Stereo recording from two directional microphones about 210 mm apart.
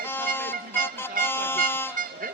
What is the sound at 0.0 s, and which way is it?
Music, 10° left (ahead or behind).